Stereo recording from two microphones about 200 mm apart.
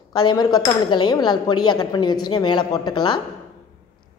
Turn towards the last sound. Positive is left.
turn(degrees=20)  # may be behind; listen again after turning